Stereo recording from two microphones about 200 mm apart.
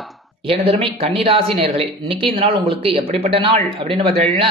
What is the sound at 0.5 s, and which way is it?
Speech, 30° right (ahead or behind).